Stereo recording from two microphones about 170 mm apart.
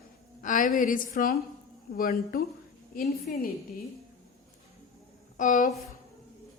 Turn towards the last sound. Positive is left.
turn(degrees=50)  # may be behind; listen again after turning